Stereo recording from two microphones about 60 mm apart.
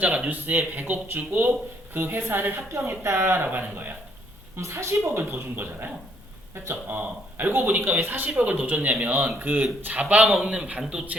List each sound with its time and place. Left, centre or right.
0.3 s a man's voice: right
4.5 s a woman's voice: right
5.3 s a man's voice: right; by 11.0 s centre